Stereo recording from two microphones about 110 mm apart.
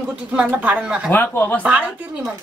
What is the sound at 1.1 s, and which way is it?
Speech, 15° left (ahead or behind).